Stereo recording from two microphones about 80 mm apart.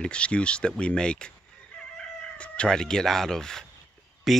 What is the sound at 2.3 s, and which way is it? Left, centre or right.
Speech, centre.